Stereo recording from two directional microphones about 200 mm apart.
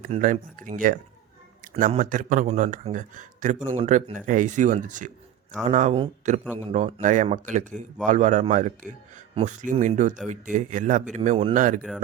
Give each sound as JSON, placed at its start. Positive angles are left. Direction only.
{"t": 0.1, "sound": "speech", "side_deg": -40}
{"t": 6.4, "sound": "speech", "side_deg": 10}
{"t": 6.7, "sound": "speech", "side_deg": -35}